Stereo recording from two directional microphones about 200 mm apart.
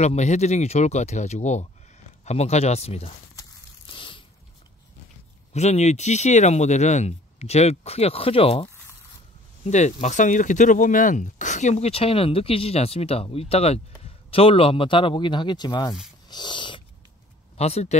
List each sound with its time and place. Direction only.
0.0 s speech: 35° left (ahead or behind)
3.3 s a sound: 25° left (ahead or behind)
5.5 s speech: 35° left (ahead or behind)
9.7 s speech: 35° left (ahead or behind)
16.3 s snort: 20° left (ahead or behind)
17.6 s speech: 30° left (ahead or behind)